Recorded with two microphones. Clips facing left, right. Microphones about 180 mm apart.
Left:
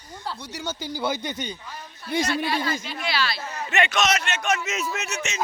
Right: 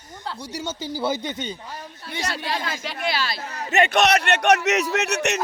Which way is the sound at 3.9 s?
60° right (ahead or behind).